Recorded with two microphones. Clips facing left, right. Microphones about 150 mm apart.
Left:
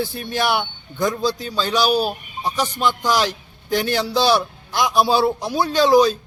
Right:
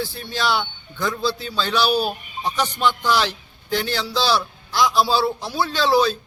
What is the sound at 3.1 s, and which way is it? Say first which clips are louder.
Speech: left 1 dB; 45° left (ahead or behind).